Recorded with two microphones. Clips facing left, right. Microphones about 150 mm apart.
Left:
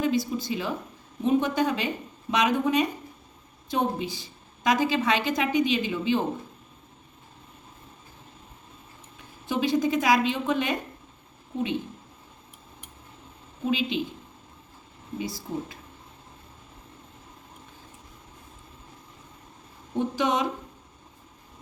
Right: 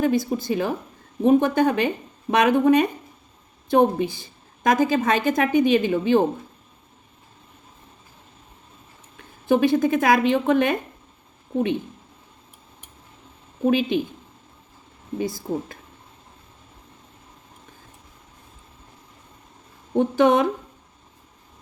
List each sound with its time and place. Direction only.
0.0 s a woman's voice: 50° right (ahead or behind)
9.1 s a woman's voice: 55° right (ahead or behind)
13.7 s a woman's voice: 55° right (ahead or behind)
15.2 s a woman's voice: 50° right (ahead or behind)
20.0 s a woman's voice: 55° right (ahead or behind)